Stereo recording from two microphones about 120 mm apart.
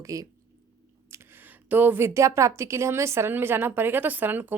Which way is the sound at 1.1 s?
20° right (ahead or behind).